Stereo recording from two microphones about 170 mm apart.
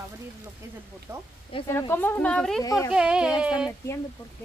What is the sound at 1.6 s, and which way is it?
Speech, 15° left (ahead or behind).